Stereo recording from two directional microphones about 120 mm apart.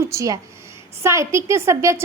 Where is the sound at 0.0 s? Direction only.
25° right (ahead or behind).